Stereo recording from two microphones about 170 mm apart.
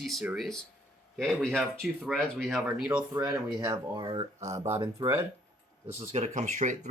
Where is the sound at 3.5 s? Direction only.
25° right (ahead or behind).